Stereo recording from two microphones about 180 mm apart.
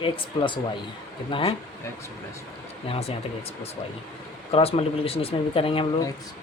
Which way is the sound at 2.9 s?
35° left (ahead or behind).